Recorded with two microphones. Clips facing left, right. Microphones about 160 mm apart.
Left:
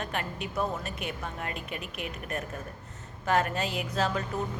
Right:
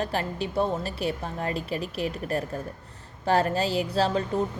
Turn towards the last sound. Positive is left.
turn(degrees=-30)  # may be behind; listen again after turning